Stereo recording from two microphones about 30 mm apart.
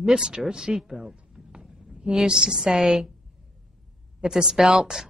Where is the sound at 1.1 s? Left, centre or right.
Right.